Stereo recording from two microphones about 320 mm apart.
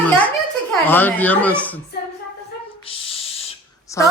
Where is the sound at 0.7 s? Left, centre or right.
Centre.